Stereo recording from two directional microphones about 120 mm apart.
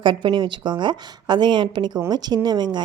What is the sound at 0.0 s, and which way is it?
A woman's voice, 40° right (ahead or behind).